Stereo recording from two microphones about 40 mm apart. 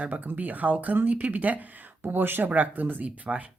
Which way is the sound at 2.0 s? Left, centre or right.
Right.